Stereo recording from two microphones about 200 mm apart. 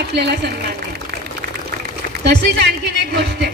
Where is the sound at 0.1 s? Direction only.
55° right (ahead or behind).